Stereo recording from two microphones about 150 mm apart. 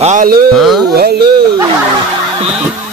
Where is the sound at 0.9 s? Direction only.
90° right.